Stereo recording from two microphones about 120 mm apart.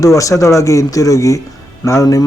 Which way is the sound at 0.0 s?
25° left (ahead or behind).